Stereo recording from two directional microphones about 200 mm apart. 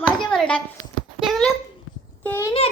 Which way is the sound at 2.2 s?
10° left (ahead or behind).